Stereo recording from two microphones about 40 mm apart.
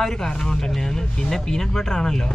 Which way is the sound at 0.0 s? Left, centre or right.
Centre.